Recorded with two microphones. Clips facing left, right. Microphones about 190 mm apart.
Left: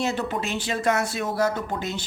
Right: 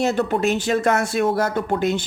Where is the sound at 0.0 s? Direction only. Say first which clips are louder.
Right 7 dB; 50° right (ahead or behind).